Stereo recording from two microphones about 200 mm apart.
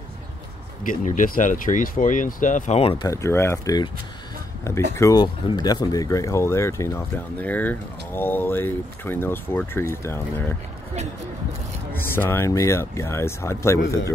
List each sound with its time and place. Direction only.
0.8 s speech: 40° left (ahead or behind)
3.1 s speech: 15° left (ahead or behind)
4.9 s speech: 15° left (ahead or behind)
12.2 s speech: 10° left (ahead or behind)